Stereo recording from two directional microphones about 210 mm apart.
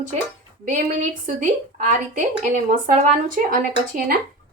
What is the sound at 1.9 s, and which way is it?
Speech, 40° right (ahead or behind).